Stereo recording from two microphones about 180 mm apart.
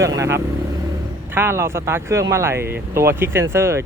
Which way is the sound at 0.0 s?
15° right (ahead or behind).